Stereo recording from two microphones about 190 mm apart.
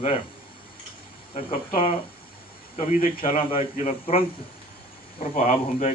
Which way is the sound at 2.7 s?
45° left (ahead or behind).